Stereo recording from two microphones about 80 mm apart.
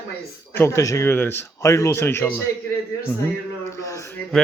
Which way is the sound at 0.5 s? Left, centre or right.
Left.